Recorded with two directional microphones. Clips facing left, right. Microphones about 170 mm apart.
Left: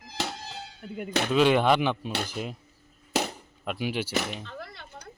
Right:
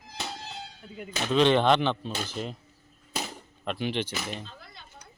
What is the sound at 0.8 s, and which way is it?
Speech, 55° left (ahead or behind).